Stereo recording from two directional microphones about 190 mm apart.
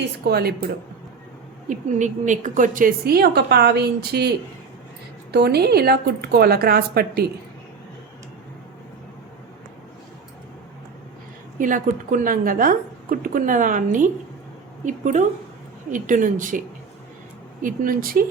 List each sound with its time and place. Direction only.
0.3 s a woman's voice: 55° right (ahead or behind)
1.7 s a woman's voice: 40° right (ahead or behind); by 7.3 s 55° right (ahead or behind)
11.5 s a woman's voice: 45° right (ahead or behind)